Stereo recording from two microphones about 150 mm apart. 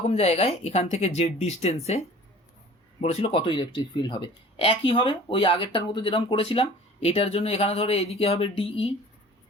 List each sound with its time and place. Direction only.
0.1 s speech: 45° left (ahead or behind)
3.0 s speech: 45° left (ahead or behind)